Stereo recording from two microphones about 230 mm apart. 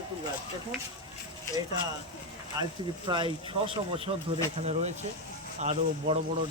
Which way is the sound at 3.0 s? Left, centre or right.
Right.